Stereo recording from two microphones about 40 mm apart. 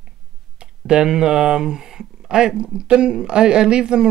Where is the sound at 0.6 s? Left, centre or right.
Right.